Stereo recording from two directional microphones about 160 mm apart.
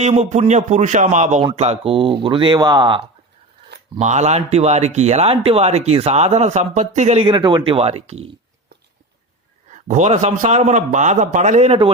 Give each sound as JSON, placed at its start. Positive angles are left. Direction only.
{"t": 0.0, "sound": "speech", "side_deg": -45}
{"t": 4.0, "sound": "speech", "side_deg": -45}
{"t": 9.7, "sound": "speech", "side_deg": -50}